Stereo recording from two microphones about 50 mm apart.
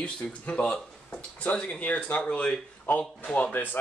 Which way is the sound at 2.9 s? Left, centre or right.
Left.